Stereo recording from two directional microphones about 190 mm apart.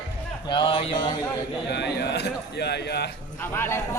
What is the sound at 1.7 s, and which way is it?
Speech, 60° left (ahead or behind).